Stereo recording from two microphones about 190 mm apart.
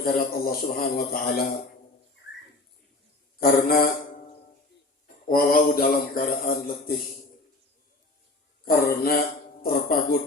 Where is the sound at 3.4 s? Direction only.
50° left (ahead or behind).